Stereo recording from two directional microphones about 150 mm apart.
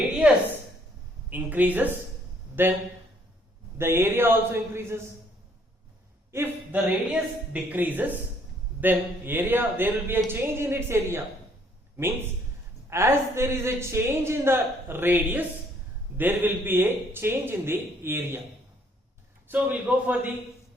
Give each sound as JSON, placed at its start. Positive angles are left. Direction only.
{"t": 1.3, "sound": "speech", "side_deg": -10}
{"t": 3.8, "sound": "speech", "side_deg": -15}
{"t": 6.3, "sound": "speech", "side_deg": -15}
{"t": 12.9, "sound": "speech", "side_deg": -15}
{"t": 19.5, "sound": "speech", "side_deg": -10}